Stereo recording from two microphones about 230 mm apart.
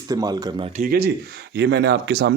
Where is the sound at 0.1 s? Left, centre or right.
Centre.